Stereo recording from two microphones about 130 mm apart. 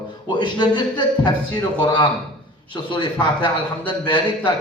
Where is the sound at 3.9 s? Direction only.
35° left (ahead or behind).